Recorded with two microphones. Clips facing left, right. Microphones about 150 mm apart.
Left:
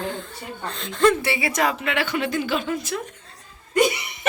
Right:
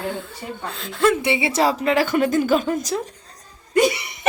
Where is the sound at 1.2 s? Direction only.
20° right (ahead or behind); by 3.0 s 40° right (ahead or behind).